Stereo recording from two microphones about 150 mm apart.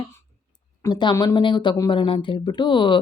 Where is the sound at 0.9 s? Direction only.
30° left (ahead or behind).